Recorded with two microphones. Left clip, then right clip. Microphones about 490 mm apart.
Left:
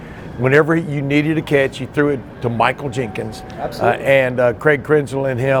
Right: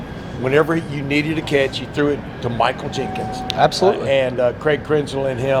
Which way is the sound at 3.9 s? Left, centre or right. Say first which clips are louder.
Left 3 dB; left.